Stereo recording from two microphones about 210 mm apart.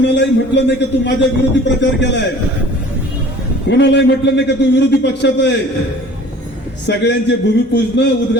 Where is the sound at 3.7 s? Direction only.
55° left (ahead or behind).